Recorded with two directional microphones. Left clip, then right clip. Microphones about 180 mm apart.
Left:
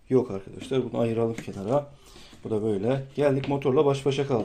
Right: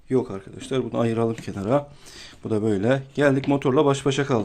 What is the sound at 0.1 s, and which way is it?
Speech, 15° right (ahead or behind).